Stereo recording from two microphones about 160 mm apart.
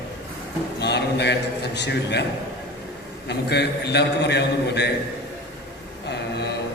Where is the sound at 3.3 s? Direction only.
90° left.